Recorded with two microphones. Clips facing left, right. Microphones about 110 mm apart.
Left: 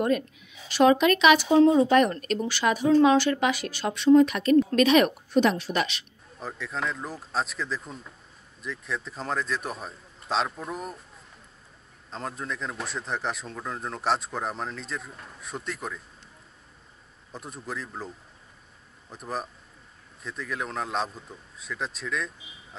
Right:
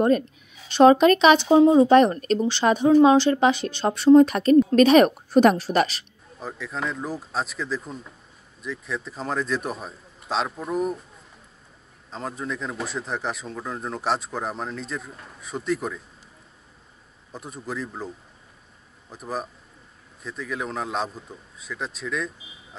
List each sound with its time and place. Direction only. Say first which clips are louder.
0.7 s speech: right 5 dB; 35° right (ahead or behind)
1.5 s a woman's voice: right 6 dB; 25° right (ahead or behind)
6.4 s speech: right 1 dB; centre (ahead or behind)
12.1 s speech: right 3 dB; centre (ahead or behind)
17.3 s speech: right 3 dB; centre (ahead or behind)